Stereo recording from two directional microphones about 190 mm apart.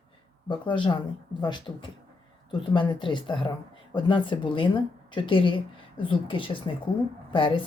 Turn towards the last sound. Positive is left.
turn(degrees=25)  # may be behind; listen again after turning